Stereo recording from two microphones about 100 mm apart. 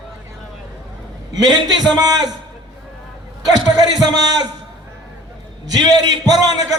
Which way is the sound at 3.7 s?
45° right (ahead or behind).